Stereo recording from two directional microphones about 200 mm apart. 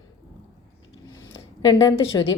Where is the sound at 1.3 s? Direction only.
20° left (ahead or behind).